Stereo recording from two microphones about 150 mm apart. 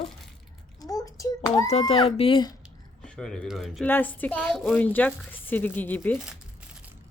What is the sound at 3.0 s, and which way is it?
Speech, 5° left (ahead or behind).